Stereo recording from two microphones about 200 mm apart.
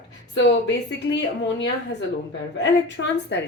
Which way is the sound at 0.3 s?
60° left (ahead or behind).